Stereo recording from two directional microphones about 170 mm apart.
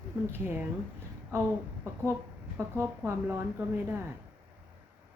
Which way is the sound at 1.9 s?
15° right (ahead or behind).